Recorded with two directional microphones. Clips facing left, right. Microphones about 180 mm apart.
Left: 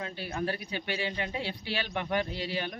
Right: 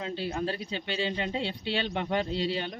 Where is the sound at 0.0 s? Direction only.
25° right (ahead or behind).